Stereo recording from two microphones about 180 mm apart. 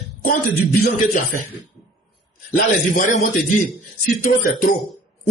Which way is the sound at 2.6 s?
50° left (ahead or behind).